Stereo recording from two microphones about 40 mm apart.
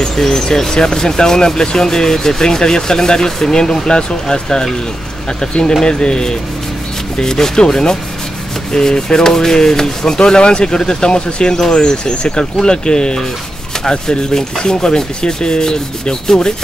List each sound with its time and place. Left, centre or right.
0.1 s speech: centre
5.4 s rub: centre
7.2 s speech: centre
11.7 s rub: left